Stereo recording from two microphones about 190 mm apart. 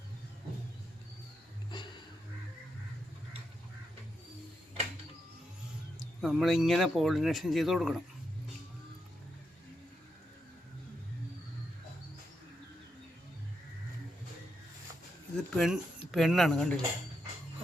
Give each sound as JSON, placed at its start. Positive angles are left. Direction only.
{"t": 1.7, "sound": "a sound", "side_deg": 25}
{"t": 6.0, "sound": "speech", "side_deg": 0}
{"t": 15.4, "sound": "speech", "side_deg": 0}